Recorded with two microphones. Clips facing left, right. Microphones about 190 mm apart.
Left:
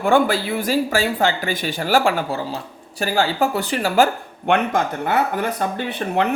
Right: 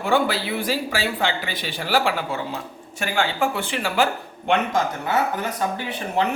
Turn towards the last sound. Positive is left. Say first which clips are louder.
# left 3 dB
turn(degrees=60)  # may be behind; listen again after turning